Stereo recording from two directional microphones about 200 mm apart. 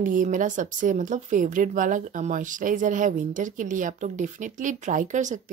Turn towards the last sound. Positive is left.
turn(degrees=-40)  # may be behind; listen again after turning